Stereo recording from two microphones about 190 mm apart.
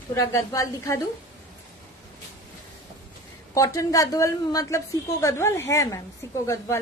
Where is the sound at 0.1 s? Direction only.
15° left (ahead or behind).